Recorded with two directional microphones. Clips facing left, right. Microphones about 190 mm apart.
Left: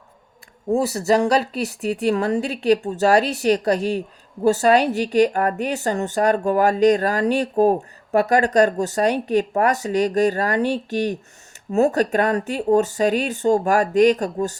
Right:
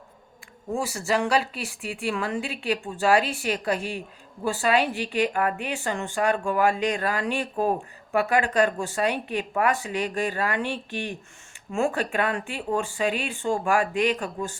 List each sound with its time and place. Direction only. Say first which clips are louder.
0.7 s a woman's voice: left 8 dB; 40° left (ahead or behind)